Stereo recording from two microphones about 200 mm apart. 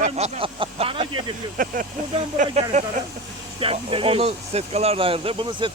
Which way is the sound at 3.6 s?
25° right (ahead or behind).